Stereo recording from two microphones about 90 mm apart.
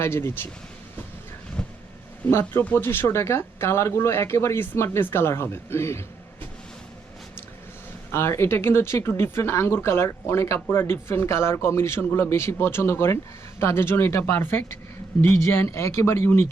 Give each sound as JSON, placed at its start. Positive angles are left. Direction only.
{"t": 0.0, "sound": "speech", "side_deg": 30}
{"t": 1.6, "sound": "vehicle", "side_deg": 10}
{"t": 2.3, "sound": "speech", "side_deg": 25}
{"t": 8.1, "sound": "speech", "side_deg": 30}